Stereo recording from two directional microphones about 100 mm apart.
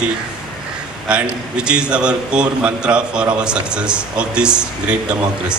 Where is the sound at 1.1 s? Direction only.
10° right (ahead or behind).